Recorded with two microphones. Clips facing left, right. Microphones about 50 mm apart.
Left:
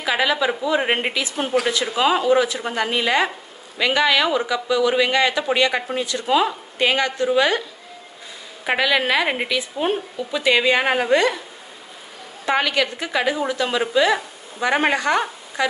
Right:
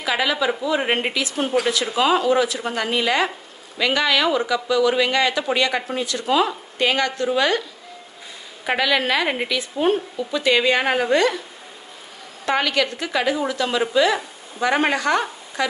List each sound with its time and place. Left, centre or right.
0.0 s a woman's voice: left
8.6 s a woman's voice: centre
12.4 s a woman's voice: centre